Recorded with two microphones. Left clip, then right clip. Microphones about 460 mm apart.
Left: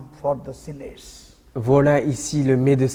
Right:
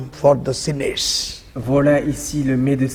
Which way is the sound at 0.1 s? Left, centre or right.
Right.